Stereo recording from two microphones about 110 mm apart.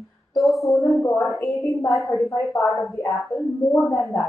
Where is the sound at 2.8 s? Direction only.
25° left (ahead or behind).